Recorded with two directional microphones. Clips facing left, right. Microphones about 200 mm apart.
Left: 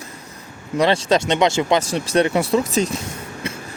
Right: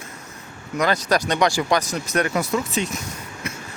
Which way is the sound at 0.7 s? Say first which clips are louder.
Left 4 dB; 30° left (ahead or behind).